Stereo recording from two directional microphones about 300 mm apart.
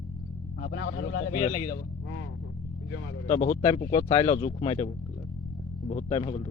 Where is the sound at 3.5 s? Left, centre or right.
Centre.